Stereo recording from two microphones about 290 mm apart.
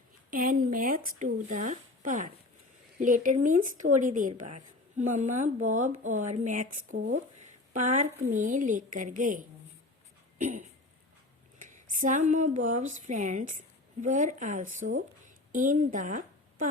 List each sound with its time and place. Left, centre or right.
0.3 s speech: right
10.3 s a sound: right
11.6 s a woman's voice: right